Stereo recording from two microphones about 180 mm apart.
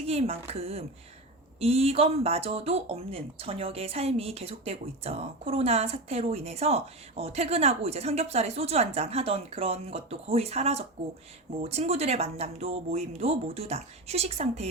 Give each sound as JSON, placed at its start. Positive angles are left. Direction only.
{"t": 0.1, "sound": "speech", "side_deg": -35}